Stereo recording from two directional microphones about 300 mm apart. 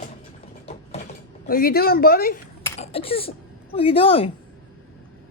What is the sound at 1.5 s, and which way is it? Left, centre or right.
Speech, left.